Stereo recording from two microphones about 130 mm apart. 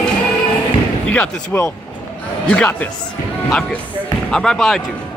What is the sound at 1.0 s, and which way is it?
Speech, 10° left (ahead or behind).